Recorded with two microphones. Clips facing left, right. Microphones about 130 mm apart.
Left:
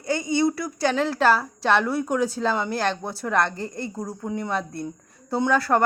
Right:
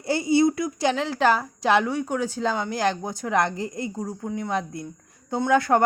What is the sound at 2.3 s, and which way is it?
Speech, centre (ahead or behind).